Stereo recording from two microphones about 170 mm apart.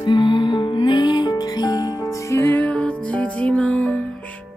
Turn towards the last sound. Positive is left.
turn(degrees=5)  # may be behind; listen again after turning